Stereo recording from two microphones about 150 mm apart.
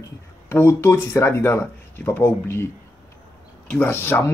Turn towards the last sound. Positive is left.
turn(degrees=15)  # may be behind; listen again after turning